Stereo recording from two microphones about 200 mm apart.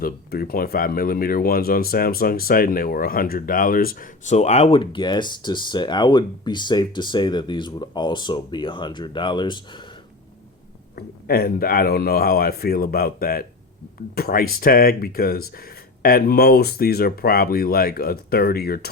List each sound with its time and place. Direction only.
0.0 s speech: 50° left (ahead or behind); by 9.8 s 25° left (ahead or behind)
10.9 s speech: 50° left (ahead or behind)